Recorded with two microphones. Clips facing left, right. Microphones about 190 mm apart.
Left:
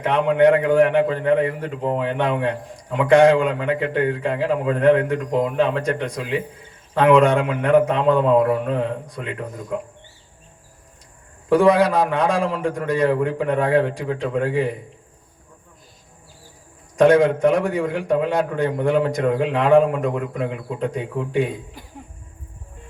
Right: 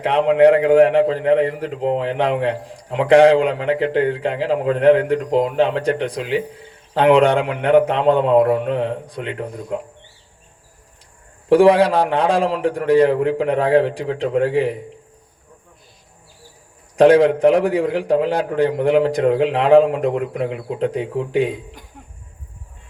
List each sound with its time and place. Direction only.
0.0 s a man's voice: 30° right (ahead or behind)
11.4 s a man's voice: 30° right (ahead or behind)
17.0 s a man's voice: 35° right (ahead or behind)